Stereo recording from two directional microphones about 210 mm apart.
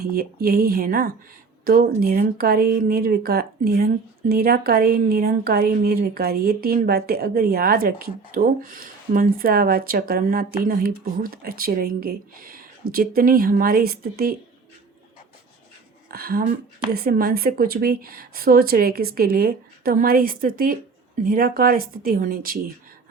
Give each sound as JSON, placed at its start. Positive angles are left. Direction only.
{"t": 0.0, "sound": "speech", "side_deg": -45}
{"t": 16.0, "sound": "speech", "side_deg": -45}